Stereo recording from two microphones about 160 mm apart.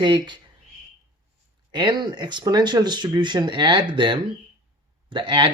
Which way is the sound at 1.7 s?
30° right (ahead or behind).